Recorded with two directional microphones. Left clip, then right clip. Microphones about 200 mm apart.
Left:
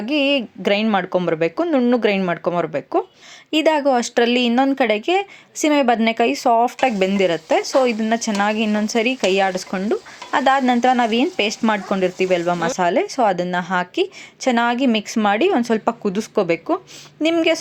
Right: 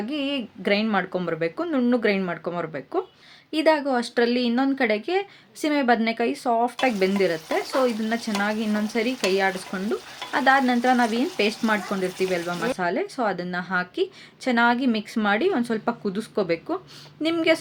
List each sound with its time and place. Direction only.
0.0 s speech: 30° left (ahead or behind)